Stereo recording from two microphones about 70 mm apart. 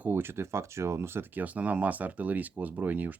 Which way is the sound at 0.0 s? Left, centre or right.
Right.